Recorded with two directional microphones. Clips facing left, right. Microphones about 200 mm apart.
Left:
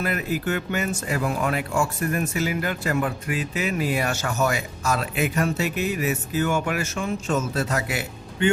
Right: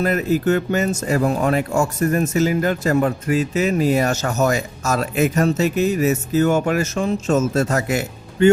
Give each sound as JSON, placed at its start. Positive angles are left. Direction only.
{"t": 0.0, "sound": "speech", "side_deg": -40}